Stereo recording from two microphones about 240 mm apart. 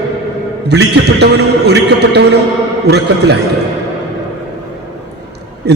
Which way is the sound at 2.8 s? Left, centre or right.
Right.